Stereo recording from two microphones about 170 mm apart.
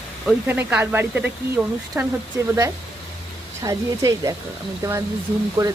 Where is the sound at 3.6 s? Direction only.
20° right (ahead or behind).